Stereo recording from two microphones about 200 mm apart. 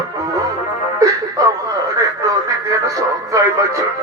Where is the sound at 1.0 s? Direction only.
20° right (ahead or behind).